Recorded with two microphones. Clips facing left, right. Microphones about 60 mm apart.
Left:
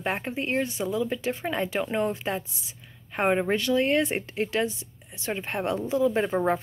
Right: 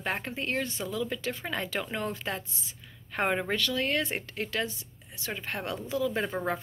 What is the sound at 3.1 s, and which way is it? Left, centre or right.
Speech, centre.